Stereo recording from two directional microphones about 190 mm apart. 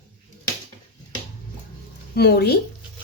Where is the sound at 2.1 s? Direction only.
60° left (ahead or behind).